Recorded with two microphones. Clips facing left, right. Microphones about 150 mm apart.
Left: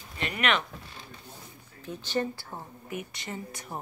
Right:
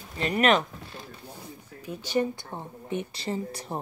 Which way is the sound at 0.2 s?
40° right (ahead or behind).